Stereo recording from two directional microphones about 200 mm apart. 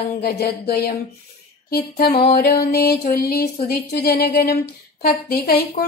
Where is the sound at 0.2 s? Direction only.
50° left (ahead or behind).